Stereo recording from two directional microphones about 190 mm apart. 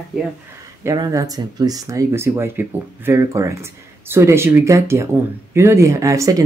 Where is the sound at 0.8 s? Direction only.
15° right (ahead or behind).